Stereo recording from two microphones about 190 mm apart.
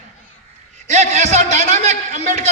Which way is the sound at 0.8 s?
35° right (ahead or behind).